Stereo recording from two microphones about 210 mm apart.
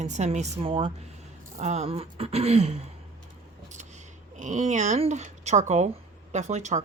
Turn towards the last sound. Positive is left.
turn(degrees=-35)  # may be behind; listen again after turning